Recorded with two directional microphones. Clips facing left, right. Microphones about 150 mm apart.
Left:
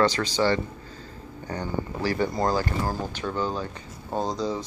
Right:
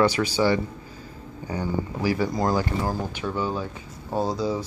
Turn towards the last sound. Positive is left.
turn(degrees=-10)  # may be behind; listen again after turning